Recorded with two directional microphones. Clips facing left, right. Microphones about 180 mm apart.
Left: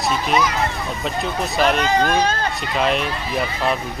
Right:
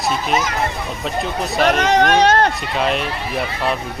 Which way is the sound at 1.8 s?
75° right (ahead or behind).